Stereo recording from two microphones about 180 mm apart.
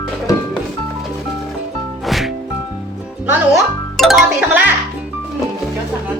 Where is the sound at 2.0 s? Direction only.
Centre (ahead or behind).